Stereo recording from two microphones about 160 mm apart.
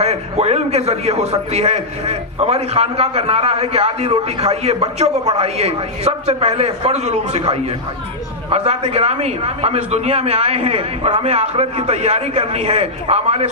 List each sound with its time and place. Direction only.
0.0 s a man's voice: 40° right (ahead or behind)